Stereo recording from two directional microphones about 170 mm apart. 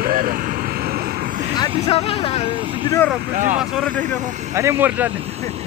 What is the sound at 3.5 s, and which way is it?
Speech, 5° left (ahead or behind).